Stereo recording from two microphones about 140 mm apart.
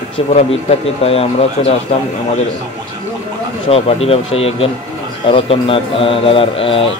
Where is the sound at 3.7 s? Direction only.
45° left (ahead or behind).